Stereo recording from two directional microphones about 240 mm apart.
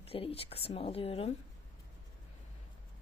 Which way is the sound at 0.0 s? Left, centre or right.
Left.